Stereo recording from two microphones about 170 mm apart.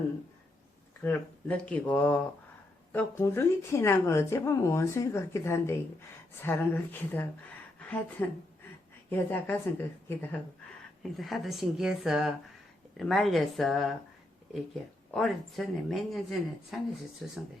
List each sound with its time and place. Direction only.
1.0 s speech: 10° left (ahead or behind)
7.8 s a sound: 10° left (ahead or behind)
9.0 s speech: 10° left (ahead or behind)
11.2 s speech: centre (ahead or behind)
15.1 s speech: centre (ahead or behind)